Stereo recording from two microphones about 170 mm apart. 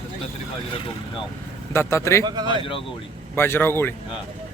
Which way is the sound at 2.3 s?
25° right (ahead or behind).